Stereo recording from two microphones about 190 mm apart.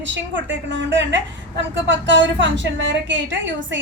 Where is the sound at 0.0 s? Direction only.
75° right (ahead or behind).